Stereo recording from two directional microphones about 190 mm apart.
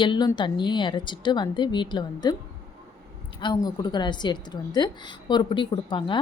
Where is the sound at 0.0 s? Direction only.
25° left (ahead or behind).